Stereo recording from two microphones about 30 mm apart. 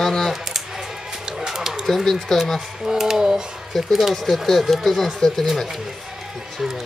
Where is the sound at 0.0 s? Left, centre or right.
Centre.